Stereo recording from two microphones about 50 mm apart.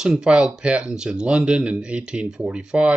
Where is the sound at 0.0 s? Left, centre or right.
Centre.